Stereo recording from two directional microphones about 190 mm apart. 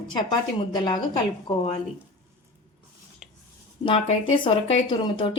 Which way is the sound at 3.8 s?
25° left (ahead or behind).